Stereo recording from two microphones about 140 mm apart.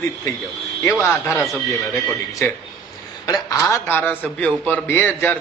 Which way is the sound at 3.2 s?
25° left (ahead or behind).